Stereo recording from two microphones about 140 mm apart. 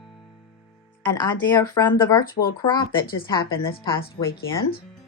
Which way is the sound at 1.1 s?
30° left (ahead or behind).